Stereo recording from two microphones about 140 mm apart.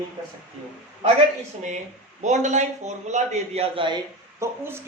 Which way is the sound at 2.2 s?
55° right (ahead or behind).